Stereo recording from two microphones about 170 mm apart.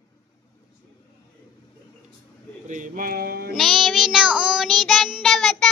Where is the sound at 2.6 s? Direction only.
50° right (ahead or behind).